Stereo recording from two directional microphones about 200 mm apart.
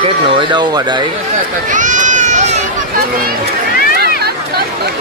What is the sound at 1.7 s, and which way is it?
Run, 40° right (ahead or behind).